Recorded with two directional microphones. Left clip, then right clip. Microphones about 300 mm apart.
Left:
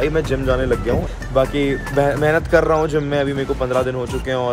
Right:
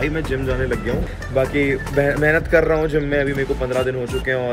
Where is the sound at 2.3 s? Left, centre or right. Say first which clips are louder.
Even; left.